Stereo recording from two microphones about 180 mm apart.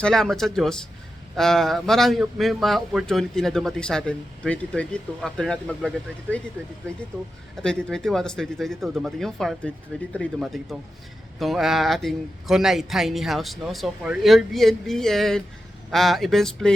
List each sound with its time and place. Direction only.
0.0 s a man's voice: centre (ahead or behind)
7.5 s a man's voice: 5° left (ahead or behind)